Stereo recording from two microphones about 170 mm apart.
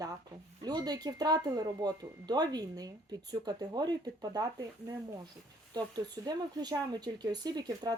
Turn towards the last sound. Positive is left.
turn(degrees=-25)  # may be behind; listen again after turning